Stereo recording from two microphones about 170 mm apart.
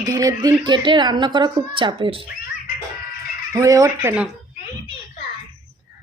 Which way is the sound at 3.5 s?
20° right (ahead or behind).